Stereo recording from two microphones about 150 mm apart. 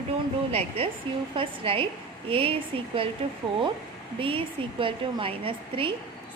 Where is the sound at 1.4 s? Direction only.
35° right (ahead or behind).